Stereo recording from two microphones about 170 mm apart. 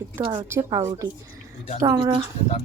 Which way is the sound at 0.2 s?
20° right (ahead or behind).